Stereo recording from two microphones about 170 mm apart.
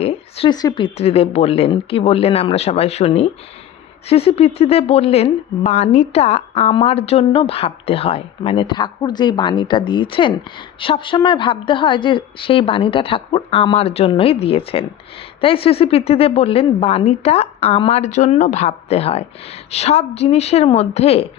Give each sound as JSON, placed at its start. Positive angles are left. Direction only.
{"t": 0.0, "sound": "a sound", "side_deg": 35}
{"t": 0.5, "sound": "a woman's voice", "side_deg": 25}
{"t": 0.9, "sound": "a woman's voice", "side_deg": 35}